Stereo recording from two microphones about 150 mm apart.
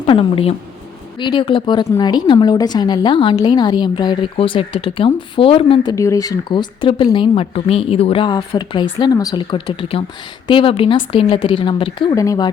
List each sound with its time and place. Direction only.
0.0 s a woman's voice: 40° left (ahead or behind)
12.1 s speech: 20° left (ahead or behind)